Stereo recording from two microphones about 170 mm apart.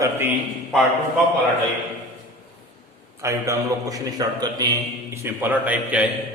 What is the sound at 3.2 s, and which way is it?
A man's voice, 20° right (ahead or behind).